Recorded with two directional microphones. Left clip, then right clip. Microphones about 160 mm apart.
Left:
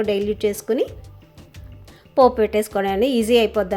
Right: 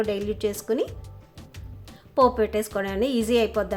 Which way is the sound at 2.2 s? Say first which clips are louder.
Left 5 dB; 15° left (ahead or behind).